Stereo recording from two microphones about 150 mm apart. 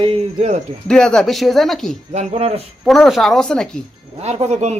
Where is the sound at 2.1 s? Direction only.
45° right (ahead or behind).